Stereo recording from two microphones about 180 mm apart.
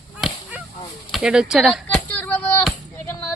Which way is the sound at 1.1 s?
5° right (ahead or behind).